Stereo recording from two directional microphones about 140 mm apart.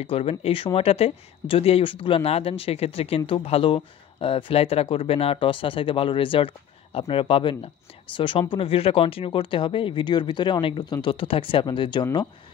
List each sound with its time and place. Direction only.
0.0 s speech: 45° left (ahead or behind)